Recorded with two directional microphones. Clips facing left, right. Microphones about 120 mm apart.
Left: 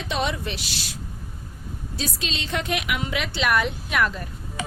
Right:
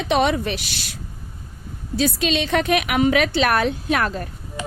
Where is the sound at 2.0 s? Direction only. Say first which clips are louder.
Right 11 dB; 70° right (ahead or behind).